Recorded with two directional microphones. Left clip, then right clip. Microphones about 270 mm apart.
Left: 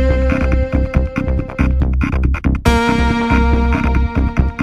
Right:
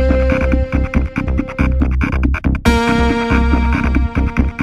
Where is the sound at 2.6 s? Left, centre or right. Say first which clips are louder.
Even; centre.